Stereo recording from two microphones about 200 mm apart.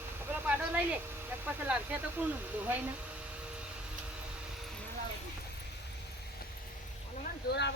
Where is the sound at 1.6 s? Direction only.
10° right (ahead or behind).